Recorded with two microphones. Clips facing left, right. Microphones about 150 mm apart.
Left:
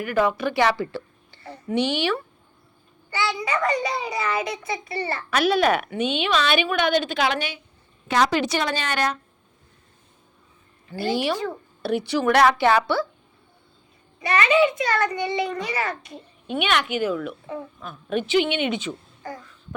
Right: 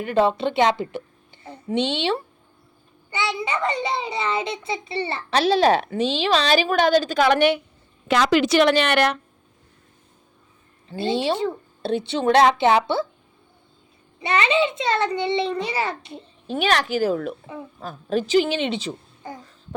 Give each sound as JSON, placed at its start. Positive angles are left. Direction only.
{"t": 0.0, "sound": "a woman's voice", "side_deg": -25}
{"t": 8.4, "sound": "a woman's voice", "side_deg": -90}
{"t": 10.8, "sound": "a child's voice", "side_deg": -25}
{"t": 14.2, "sound": "a child's voice", "side_deg": -25}